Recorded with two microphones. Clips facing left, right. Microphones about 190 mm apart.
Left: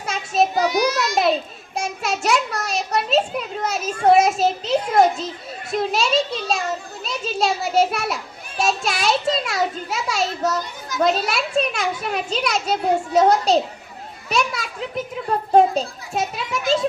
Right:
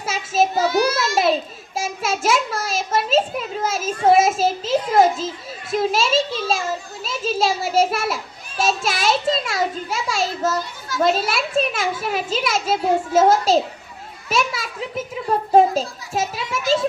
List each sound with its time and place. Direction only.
0.0 s child singing: 5° right (ahead or behind)
0.5 s a child's voice: 15° left (ahead or behind)
1.1 s a child's voice: centre (ahead or behind)
10.6 s a child's voice: 20° left (ahead or behind)
11.0 s a child's voice: centre (ahead or behind)